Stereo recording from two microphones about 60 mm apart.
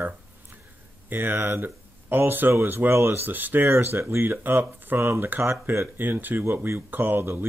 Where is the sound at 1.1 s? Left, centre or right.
Right.